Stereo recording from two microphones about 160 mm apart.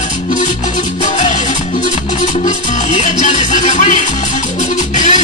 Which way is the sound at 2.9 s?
50° left (ahead or behind).